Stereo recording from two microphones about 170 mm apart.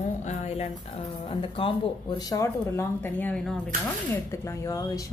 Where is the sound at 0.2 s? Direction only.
40° left (ahead or behind).